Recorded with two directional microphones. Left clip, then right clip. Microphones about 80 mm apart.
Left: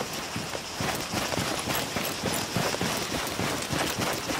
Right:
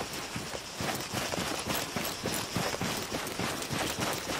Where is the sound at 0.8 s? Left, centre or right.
Left.